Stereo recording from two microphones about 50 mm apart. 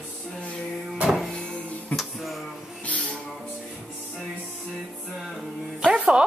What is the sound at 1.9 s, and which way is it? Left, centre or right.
Music, left.